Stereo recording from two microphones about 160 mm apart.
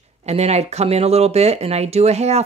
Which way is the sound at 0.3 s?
40° right (ahead or behind).